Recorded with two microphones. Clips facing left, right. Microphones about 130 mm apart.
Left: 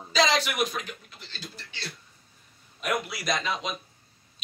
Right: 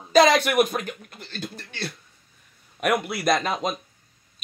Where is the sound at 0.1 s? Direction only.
55° right (ahead or behind).